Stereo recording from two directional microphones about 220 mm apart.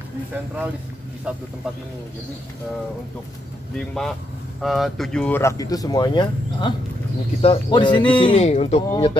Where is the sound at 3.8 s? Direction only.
5° left (ahead or behind).